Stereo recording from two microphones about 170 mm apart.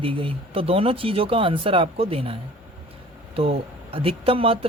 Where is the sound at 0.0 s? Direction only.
30° right (ahead or behind).